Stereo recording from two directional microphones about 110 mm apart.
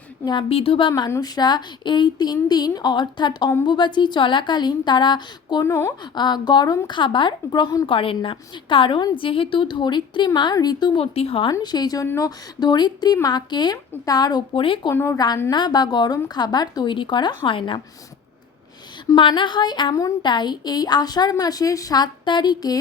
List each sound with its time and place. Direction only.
0.4 s a woman's voice: 60° left (ahead or behind); by 5.6 s 40° left (ahead or behind)
5.6 s speech: 25° left (ahead or behind)
6.1 s a woman's voice: 40° left (ahead or behind)
11.0 s speech: 65° left (ahead or behind)
11.6 s speech: 40° left (ahead or behind)
14.9 s speech: 25° left (ahead or behind)
15.4 s speech: 40° left (ahead or behind)
19.1 s a woman's voice: 50° left (ahead or behind)
19.9 s speech: 30° left (ahead or behind)